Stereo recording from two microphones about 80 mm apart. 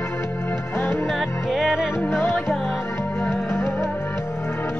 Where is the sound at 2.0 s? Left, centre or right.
Left.